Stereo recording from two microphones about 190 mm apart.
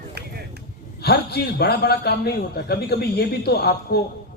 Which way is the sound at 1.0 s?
55° left (ahead or behind).